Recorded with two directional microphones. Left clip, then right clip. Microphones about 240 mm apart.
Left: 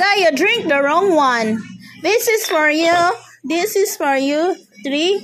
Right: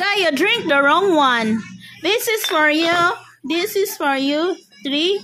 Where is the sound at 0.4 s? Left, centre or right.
Centre.